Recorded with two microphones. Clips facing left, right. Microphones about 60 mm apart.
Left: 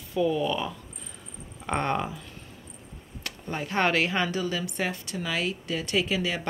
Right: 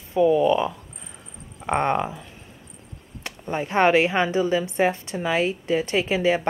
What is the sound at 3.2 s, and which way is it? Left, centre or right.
A woman's voice, right.